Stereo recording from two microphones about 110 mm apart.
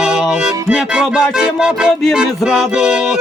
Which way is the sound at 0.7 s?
5° right (ahead or behind).